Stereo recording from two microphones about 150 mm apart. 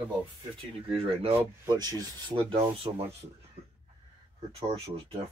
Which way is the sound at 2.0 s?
30° right (ahead or behind).